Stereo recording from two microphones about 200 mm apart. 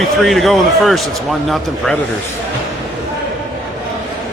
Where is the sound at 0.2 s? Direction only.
Centre (ahead or behind).